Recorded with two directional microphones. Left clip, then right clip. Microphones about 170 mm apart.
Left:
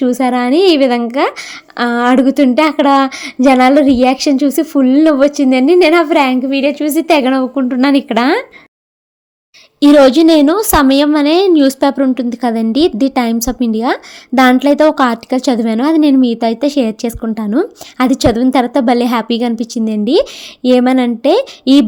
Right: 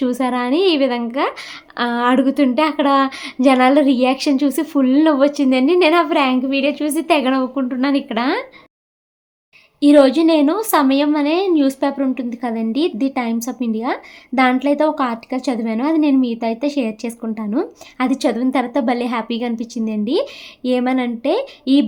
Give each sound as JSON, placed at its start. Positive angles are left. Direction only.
{"t": 0.0, "sound": "a woman's voice", "side_deg": 30}
{"t": 9.8, "sound": "a woman's voice", "side_deg": 45}